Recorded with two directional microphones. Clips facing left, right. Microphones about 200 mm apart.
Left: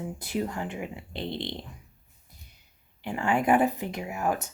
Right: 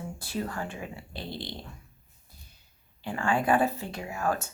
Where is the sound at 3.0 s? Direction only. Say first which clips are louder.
Left 2 dB; 20° left (ahead or behind).